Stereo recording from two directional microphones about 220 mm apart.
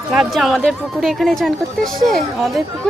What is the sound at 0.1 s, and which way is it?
Speech, centre (ahead or behind).